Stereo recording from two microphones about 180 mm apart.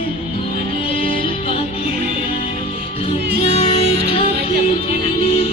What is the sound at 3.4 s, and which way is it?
Music, 35° left (ahead or behind).